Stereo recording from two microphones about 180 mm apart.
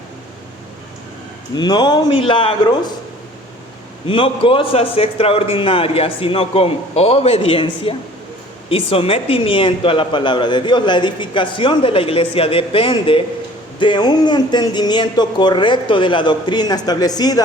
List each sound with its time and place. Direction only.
1.5 s a woman's voice: 25° left (ahead or behind)
4.0 s a man's voice: 30° left (ahead or behind)